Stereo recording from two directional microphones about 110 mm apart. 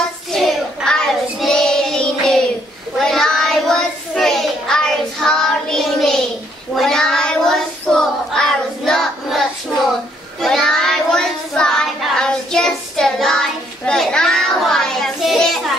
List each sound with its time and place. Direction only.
0.3 s child singing: centre (ahead or behind)
10.4 s child singing: 5° left (ahead or behind)